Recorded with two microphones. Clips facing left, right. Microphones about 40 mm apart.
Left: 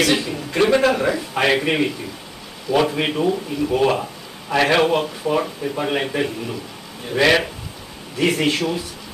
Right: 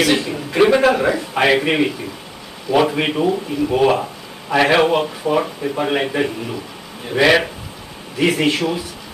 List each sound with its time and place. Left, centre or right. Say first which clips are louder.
0.0 s a man's voice: right 2 dB; centre